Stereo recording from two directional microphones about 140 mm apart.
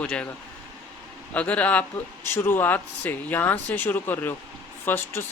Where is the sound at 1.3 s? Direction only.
10° left (ahead or behind).